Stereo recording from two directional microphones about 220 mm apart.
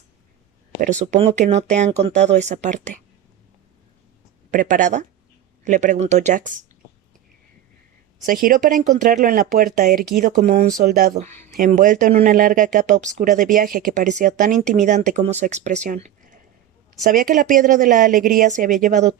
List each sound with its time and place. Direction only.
0.8 s speech: 35° right (ahead or behind)
4.5 s speech: 35° right (ahead or behind)
8.3 s speech: 40° right (ahead or behind)